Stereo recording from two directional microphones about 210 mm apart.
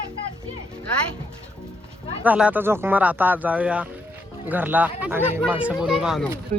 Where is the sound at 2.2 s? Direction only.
5° right (ahead or behind).